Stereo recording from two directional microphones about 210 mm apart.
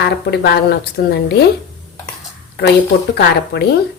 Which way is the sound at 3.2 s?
50° left (ahead or behind).